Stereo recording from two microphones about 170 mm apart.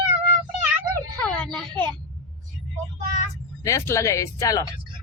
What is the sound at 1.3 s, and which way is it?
Speech, 10° left (ahead or behind).